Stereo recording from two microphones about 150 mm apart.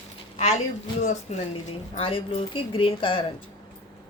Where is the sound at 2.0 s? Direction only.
35° left (ahead or behind).